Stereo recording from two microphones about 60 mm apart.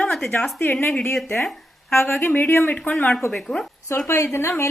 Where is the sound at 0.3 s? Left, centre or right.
Left.